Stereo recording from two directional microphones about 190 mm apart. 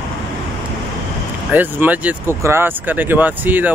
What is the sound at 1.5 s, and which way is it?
Speech, 10° right (ahead or behind).